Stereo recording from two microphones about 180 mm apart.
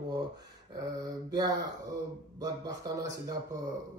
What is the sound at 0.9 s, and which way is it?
Mantra, 20° right (ahead or behind).